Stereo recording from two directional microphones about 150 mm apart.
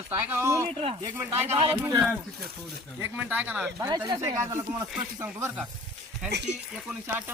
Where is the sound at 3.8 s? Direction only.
25° right (ahead or behind).